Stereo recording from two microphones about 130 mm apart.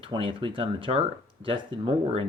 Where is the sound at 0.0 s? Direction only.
40° right (ahead or behind).